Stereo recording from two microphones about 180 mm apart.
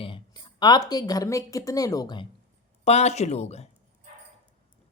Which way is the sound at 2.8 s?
35° left (ahead or behind).